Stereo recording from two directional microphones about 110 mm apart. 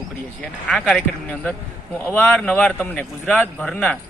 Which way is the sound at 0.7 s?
10° left (ahead or behind).